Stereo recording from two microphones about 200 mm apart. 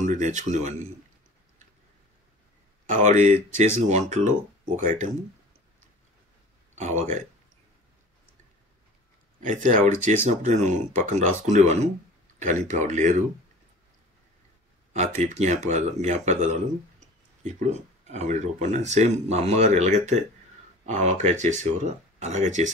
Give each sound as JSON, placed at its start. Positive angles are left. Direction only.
{"t": 0.0, "sound": "speech", "side_deg": -35}
{"t": 2.9, "sound": "speech", "side_deg": -40}
{"t": 6.7, "sound": "speech", "side_deg": -35}
{"t": 9.4, "sound": "speech", "side_deg": -40}
{"t": 14.9, "sound": "speech", "side_deg": -35}